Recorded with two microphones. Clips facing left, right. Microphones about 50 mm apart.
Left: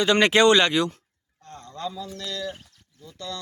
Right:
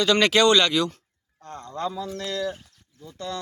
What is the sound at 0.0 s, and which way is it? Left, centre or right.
Speech, left.